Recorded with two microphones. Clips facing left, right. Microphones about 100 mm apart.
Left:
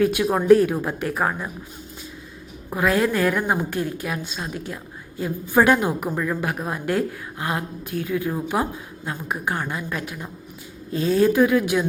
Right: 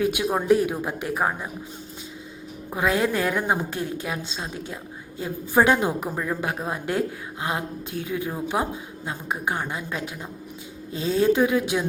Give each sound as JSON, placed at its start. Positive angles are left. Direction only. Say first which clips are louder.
{"t": 0.0, "sound": "speech", "louder": "left 3 dB", "side_deg": -15}
{"t": 2.7, "sound": "a woman's voice", "louder": "left 2 dB", "side_deg": -20}